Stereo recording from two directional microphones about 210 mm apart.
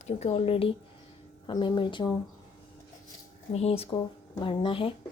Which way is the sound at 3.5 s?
30° left (ahead or behind).